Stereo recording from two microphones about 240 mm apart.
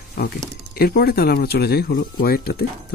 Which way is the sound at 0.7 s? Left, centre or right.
Left.